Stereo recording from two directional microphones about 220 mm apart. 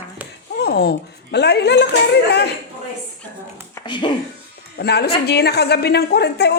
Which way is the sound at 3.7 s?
20° left (ahead or behind).